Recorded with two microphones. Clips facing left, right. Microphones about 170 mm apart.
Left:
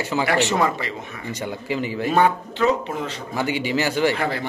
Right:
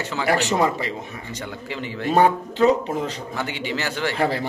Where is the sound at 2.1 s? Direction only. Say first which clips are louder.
Right 2 dB; 35° right (ahead or behind).